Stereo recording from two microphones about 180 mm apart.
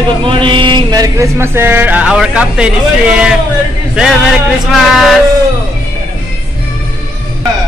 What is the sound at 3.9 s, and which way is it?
Music, 5° right (ahead or behind).